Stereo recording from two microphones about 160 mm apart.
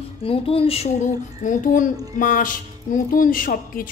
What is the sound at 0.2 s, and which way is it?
Speech, 35° left (ahead or behind).